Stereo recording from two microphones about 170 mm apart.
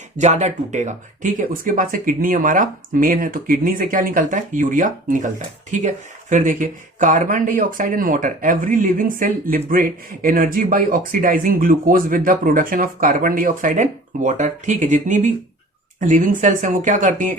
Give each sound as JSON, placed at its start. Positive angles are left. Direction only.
{"t": 0.2, "sound": "speech", "side_deg": -45}